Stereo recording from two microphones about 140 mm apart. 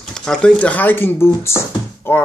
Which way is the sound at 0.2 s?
5° left (ahead or behind).